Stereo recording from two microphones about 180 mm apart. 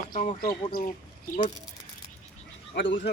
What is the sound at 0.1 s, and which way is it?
Speech, 45° left (ahead or behind).